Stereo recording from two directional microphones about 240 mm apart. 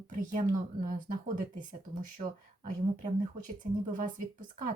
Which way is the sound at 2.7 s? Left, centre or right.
Right.